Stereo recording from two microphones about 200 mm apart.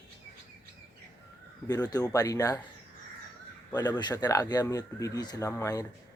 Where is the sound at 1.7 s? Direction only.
20° left (ahead or behind).